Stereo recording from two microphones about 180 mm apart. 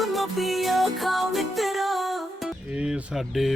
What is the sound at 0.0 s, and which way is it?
Music, centre (ahead or behind).